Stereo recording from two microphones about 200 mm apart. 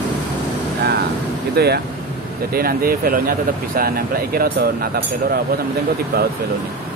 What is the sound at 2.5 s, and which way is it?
Speech, 50° right (ahead or behind).